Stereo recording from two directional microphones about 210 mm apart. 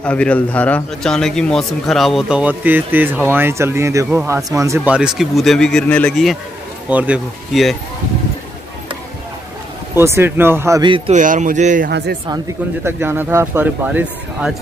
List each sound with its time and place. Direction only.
0.0 s a man's voice: 5° left (ahead or behind)
6.9 s a man's voice: 5° right (ahead or behind)
9.9 s speech: 10° right (ahead or behind)
11.1 s speech: 40° right (ahead or behind)
12.8 s speech: 10° right (ahead or behind)